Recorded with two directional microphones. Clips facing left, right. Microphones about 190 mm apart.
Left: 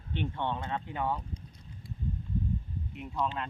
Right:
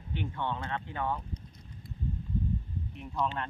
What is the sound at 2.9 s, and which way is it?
Speech, 5° left (ahead or behind).